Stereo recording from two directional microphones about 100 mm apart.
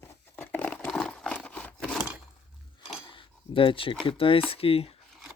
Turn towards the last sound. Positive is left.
turn(degrees=70)  # may be behind; listen again after turning